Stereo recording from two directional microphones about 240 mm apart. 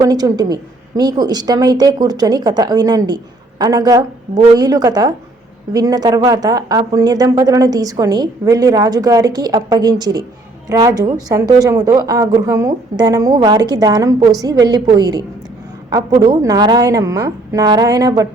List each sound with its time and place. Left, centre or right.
0.0 s speech: centre